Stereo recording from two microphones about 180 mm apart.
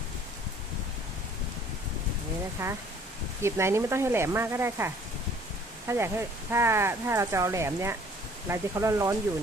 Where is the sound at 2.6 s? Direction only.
15° right (ahead or behind).